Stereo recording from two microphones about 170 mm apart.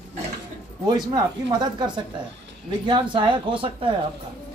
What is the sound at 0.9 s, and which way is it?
A man's voice, 25° right (ahead or behind).